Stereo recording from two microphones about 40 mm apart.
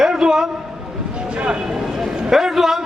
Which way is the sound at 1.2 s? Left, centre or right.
Right.